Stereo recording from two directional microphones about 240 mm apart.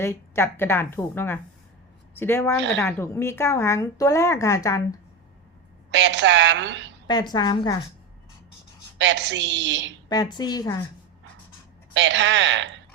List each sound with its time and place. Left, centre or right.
0.0 s speech: centre
5.9 s a woman's voice: right
7.1 s speech: centre
9.0 s a woman's voice: right
10.1 s speech: centre
11.9 s a woman's voice: right